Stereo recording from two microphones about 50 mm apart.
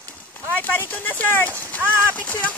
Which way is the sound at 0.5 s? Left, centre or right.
Left.